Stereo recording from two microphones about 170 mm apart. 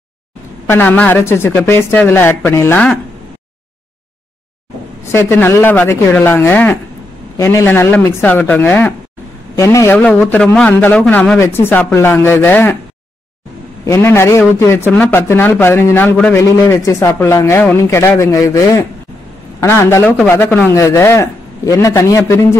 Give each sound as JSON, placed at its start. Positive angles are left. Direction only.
{"t": 0.7, "sound": "a man's voice", "side_deg": 10}
{"t": 5.1, "sound": "a man's voice", "side_deg": 15}
{"t": 10.3, "sound": "a man's voice", "side_deg": 5}
{"t": 13.8, "sound": "a man's voice", "side_deg": 15}